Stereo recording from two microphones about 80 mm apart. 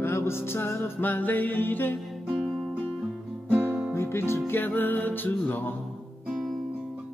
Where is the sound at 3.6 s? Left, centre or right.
Left.